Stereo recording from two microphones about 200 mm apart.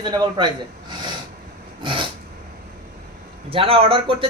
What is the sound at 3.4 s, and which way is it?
Speech, 30° right (ahead or behind).